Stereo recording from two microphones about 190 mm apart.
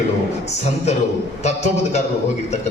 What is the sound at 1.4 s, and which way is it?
Speech, 35° left (ahead or behind).